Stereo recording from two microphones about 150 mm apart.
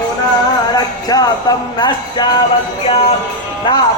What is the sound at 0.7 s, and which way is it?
Music, 25° left (ahead or behind).